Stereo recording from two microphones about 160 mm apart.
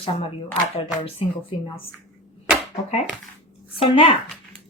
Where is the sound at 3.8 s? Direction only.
35° left (ahead or behind).